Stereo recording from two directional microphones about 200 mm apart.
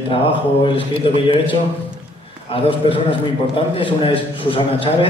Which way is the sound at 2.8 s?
25° left (ahead or behind).